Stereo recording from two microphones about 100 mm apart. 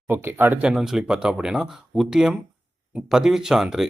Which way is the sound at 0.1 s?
20° right (ahead or behind).